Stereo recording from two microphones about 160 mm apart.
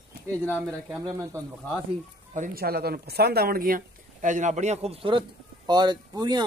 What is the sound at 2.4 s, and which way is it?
A man's voice, 70° right (ahead or behind).